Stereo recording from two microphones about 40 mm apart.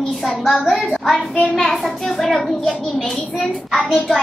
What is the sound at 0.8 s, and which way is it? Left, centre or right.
Speech, left.